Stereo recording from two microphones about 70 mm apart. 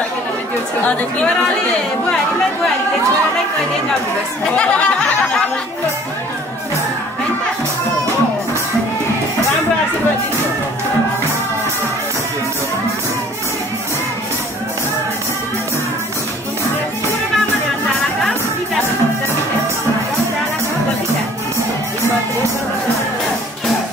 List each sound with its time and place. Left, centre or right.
0.8 s a woman's voice: centre
4.5 s speech: centre